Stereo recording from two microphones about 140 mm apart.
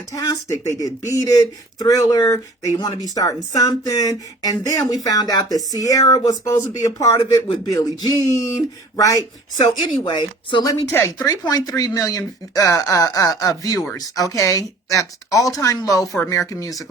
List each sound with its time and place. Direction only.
0.1 s speech: 25° left (ahead or behind)
10.9 s speech: 15° left (ahead or behind)